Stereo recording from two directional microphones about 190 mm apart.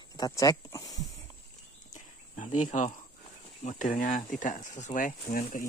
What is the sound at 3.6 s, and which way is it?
Speech, 40° left (ahead or behind).